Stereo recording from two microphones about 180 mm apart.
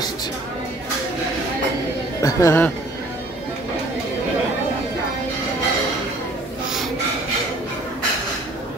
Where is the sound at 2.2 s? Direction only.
15° left (ahead or behind).